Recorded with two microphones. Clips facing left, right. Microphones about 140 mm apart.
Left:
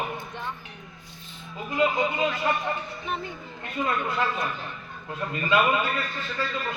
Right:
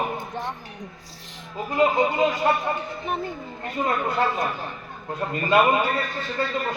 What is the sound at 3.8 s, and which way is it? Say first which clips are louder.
A man's voice: right 4 dB; 40° right (ahead or behind).